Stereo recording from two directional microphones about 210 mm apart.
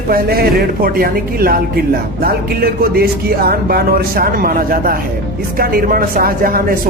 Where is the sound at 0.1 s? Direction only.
45° right (ahead or behind).